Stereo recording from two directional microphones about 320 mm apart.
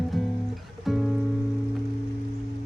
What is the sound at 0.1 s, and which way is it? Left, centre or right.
Music, centre.